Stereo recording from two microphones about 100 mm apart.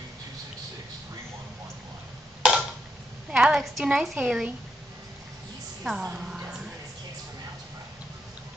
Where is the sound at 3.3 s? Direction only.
5° right (ahead or behind).